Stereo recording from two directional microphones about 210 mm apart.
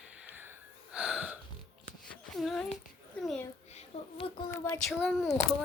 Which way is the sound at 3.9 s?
25° left (ahead or behind).